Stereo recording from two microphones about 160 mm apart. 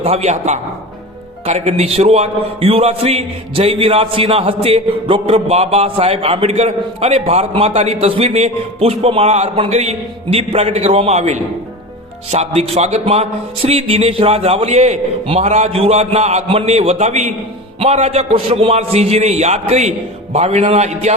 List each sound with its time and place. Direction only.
0.0 s a man's voice: 40° right (ahead or behind)